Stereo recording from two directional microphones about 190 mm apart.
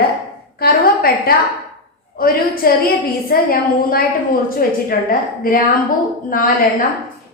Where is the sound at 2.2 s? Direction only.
50° left (ahead or behind).